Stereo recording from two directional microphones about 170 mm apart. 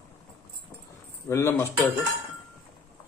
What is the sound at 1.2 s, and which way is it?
Speech, 15° left (ahead or behind).